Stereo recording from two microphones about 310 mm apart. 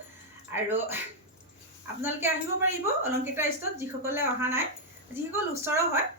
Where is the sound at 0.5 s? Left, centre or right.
Centre.